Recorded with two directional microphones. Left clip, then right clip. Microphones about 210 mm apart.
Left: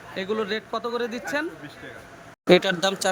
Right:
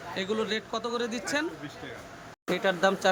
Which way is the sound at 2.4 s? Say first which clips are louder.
Left 9 dB; 40° left (ahead or behind).